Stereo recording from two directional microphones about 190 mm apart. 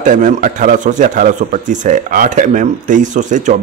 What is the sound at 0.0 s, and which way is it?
Speech, 40° right (ahead or behind).